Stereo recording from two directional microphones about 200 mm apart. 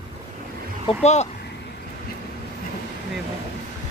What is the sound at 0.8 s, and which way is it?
Speech, 35° left (ahead or behind).